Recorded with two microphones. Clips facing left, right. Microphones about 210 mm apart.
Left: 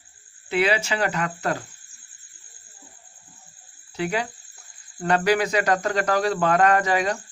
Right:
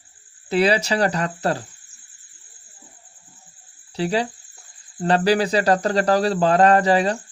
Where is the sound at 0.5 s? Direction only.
35° right (ahead or behind).